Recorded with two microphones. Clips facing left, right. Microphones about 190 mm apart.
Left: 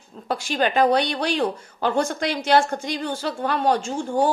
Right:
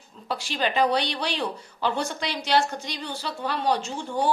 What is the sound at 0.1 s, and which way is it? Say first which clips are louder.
A woman's voice: left 5 dB; 50° left (ahead or behind).